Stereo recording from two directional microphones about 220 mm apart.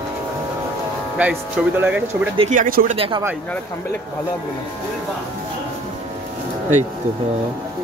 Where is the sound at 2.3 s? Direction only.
30° right (ahead or behind).